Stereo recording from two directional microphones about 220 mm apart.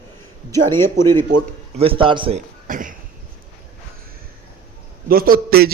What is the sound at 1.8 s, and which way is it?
Speech, 25° right (ahead or behind).